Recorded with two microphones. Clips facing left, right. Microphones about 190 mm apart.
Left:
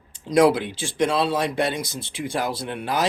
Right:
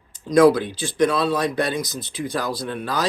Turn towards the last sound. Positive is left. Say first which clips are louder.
# even
turn(degrees=25)  # may be behind; listen again after turning